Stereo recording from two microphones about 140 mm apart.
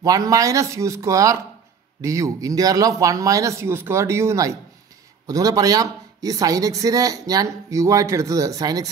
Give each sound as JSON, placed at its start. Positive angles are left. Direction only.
{"t": 0.0, "sound": "a woman's voice", "side_deg": -25}